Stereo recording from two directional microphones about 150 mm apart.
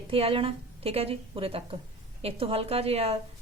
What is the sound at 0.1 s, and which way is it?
Speech, 40° right (ahead or behind).